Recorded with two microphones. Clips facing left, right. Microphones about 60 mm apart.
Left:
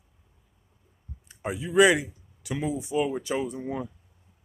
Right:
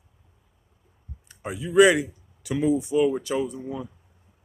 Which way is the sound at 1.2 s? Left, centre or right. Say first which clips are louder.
Even; centre.